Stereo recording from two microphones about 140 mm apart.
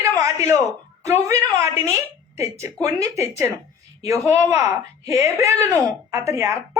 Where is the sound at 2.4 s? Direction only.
20° right (ahead or behind).